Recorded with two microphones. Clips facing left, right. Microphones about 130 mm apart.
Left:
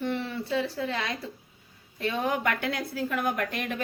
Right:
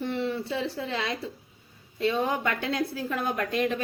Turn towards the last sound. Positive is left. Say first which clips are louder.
# right 4 dB
turn(degrees=-25)  # may be behind; listen again after turning